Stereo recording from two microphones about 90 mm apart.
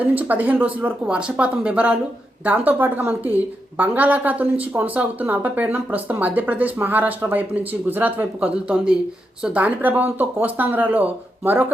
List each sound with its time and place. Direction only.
0.0 s a woman's voice: 15° right (ahead or behind)